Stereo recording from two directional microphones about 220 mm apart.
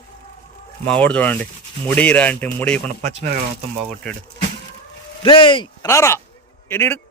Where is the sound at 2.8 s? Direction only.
30° right (ahead or behind).